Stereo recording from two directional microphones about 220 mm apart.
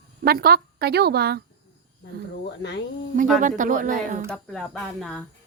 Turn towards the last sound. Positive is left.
turn(degrees=0)  # may be behind; listen again after turning